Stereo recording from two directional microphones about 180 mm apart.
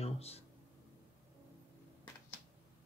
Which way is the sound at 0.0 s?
35° left (ahead or behind).